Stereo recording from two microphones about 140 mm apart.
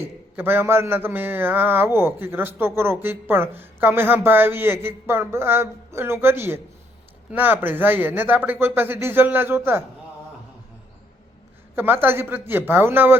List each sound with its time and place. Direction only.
0.0 s a man's voice: 15° right (ahead or behind)
11.7 s a man's voice: 15° right (ahead or behind)